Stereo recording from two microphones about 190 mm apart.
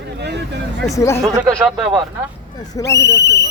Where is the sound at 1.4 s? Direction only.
15° right (ahead or behind).